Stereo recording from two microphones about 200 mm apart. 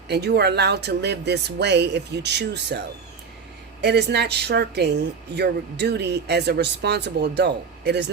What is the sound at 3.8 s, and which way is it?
Speech, 55° right (ahead or behind).